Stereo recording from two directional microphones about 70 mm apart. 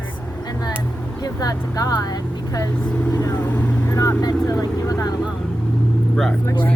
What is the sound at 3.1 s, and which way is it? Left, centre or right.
Speech, left.